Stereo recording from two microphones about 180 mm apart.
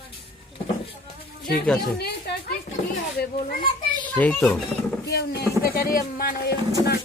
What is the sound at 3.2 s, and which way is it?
Speech, 60° left (ahead or behind).